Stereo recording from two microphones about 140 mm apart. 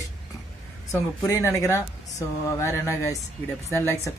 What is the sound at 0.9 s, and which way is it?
Speech, 20° left (ahead or behind).